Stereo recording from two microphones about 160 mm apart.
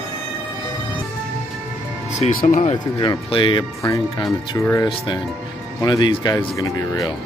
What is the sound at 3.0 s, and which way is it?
Speech, 30° left (ahead or behind).